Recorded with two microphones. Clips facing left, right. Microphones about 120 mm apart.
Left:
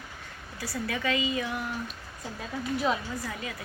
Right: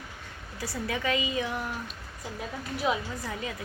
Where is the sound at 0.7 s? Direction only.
20° right (ahead or behind).